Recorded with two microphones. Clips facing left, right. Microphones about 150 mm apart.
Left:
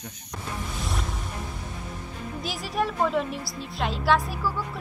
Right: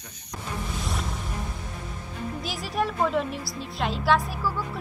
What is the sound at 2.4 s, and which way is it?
Speech, centre (ahead or behind).